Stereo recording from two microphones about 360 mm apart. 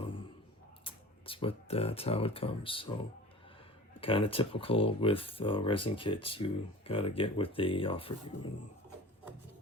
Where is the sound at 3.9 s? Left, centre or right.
Centre.